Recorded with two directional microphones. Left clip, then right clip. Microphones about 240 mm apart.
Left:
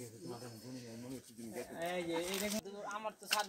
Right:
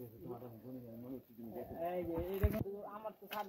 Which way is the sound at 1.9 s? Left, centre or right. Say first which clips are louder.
Left 4 dB; left.